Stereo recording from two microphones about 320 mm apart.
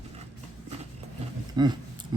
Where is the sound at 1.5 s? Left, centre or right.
Centre.